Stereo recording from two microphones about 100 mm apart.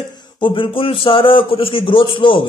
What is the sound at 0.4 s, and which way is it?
A man's voice, 55° left (ahead or behind).